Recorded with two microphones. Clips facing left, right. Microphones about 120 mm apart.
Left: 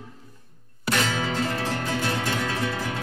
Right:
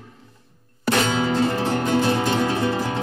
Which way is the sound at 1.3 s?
35° right (ahead or behind).